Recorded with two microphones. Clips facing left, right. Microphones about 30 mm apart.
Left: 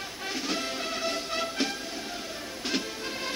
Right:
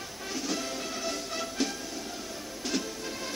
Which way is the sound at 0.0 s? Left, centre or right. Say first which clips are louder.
Left 2 dB; left.